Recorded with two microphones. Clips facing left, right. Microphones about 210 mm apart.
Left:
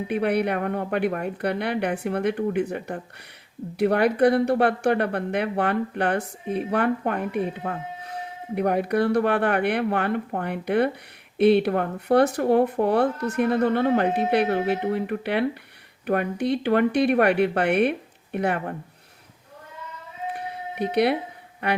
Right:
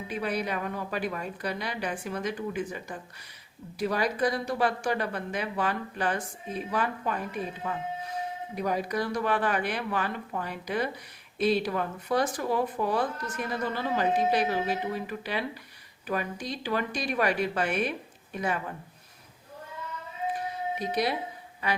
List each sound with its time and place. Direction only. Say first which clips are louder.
0.1 s speech: left 8 dB; 60° left (ahead or behind)
20.3 s music: right 1 dB; 60° left (ahead or behind)
21.6 s speech: left 5 dB; 60° left (ahead or behind)